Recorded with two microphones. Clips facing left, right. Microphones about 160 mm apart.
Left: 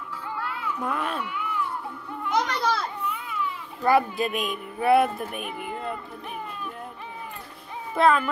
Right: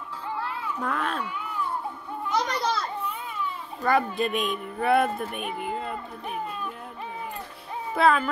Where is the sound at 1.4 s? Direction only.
35° right (ahead or behind).